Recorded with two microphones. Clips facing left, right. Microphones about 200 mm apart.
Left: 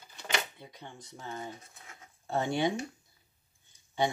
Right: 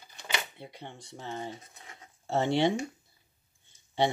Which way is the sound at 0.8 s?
25° right (ahead or behind).